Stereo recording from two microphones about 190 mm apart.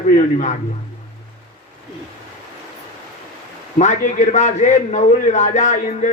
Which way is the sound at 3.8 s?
40° left (ahead or behind).